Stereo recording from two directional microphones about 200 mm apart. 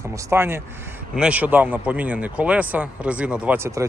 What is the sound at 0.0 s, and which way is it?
Speech, 15° right (ahead or behind).